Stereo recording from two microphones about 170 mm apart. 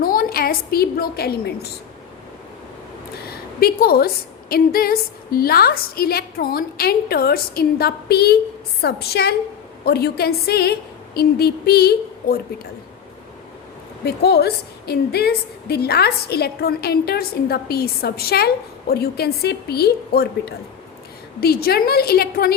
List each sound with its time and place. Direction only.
0.0 s a woman's voice: 60° left (ahead or behind)
3.2 s a woman's voice: 65° left (ahead or behind)
14.0 s a woman's voice: 75° left (ahead or behind)